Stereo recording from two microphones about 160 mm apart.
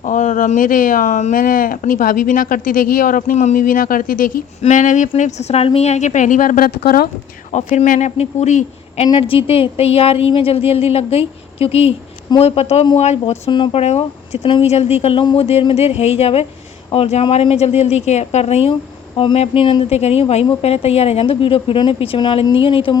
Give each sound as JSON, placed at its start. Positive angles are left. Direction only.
{"t": 0.0, "sound": "a woman's voice", "side_deg": 50}
{"t": 7.5, "sound": "a woman's voice", "side_deg": 50}
{"t": 9.0, "sound": "a woman's voice", "side_deg": 30}